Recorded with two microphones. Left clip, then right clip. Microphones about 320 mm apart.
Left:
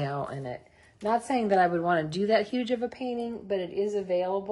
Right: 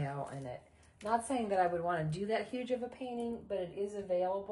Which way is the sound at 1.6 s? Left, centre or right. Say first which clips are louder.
Left 8 dB; left.